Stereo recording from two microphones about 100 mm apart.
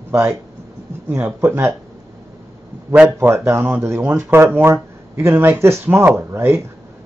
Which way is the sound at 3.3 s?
25° right (ahead or behind).